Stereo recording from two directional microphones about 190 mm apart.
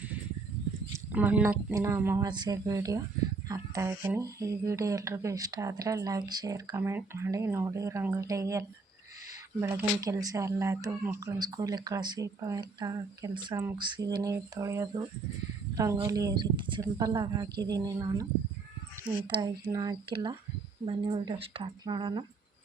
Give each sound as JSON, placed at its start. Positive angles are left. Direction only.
{"t": 0.9, "sound": "speech", "side_deg": -10}
{"t": 19.6, "sound": "speech", "side_deg": -20}